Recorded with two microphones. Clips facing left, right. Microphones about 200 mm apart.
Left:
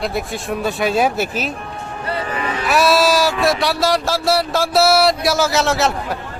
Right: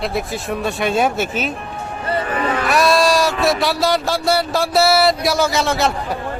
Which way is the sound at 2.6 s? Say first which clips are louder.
Left 1 dB; centre (ahead or behind).